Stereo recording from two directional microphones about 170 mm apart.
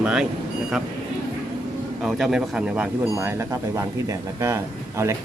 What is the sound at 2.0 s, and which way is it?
Speech, 5° right (ahead or behind).